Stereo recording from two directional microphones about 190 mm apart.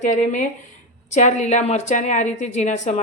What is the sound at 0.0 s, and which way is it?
A woman's voice, 40° left (ahead or behind).